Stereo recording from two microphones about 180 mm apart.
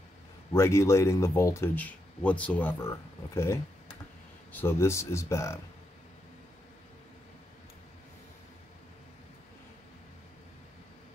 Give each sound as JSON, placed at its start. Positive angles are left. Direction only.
{"t": 0.5, "sound": "speech", "side_deg": 15}